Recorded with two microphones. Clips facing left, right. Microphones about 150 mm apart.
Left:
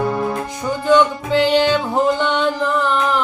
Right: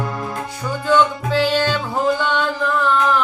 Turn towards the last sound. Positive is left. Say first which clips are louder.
# left 1 dB
turn(degrees=15)  # may be behind; listen again after turning